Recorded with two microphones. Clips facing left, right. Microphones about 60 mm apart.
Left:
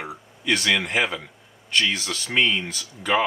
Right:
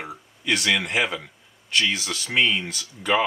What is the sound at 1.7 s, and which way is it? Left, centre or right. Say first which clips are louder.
Speech: even; centre.